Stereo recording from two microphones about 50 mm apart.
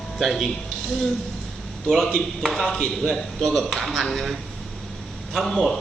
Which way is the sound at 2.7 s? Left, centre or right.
Centre.